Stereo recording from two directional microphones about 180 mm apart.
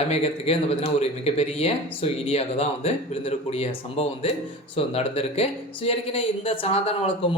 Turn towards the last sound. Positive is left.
turn(degrees=30)  # may be behind; listen again after turning